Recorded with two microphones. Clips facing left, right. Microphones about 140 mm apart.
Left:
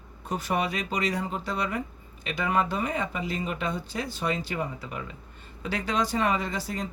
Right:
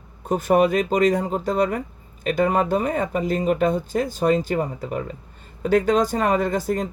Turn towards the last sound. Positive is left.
turn(degrees=-50)  # may be behind; listen again after turning